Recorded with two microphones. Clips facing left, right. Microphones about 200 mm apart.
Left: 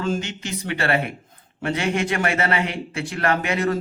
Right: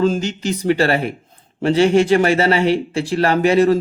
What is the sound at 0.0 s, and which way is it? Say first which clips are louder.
Speech: right 8 dB; 35° right (ahead or behind).